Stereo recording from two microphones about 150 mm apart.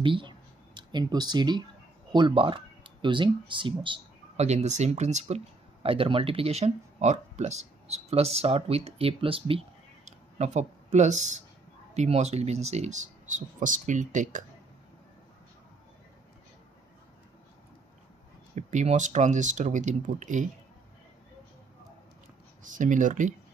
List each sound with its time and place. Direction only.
0.0 s a sound: 35° right (ahead or behind)
2.1 s speech: 35° right (ahead or behind)
4.4 s speech: 50° right (ahead or behind)
18.5 s speech: 50° right (ahead or behind)
22.6 s speech: 60° right (ahead or behind)